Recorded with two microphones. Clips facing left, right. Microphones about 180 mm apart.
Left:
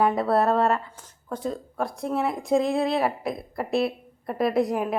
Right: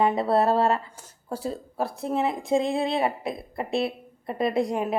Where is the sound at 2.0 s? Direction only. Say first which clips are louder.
Even; 25° right (ahead or behind).